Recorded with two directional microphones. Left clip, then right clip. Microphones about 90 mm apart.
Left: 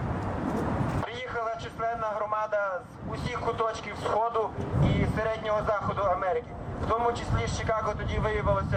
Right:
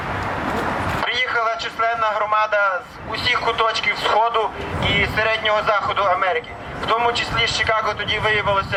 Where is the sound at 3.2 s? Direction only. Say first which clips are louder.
Right 11 dB; 30° right (ahead or behind).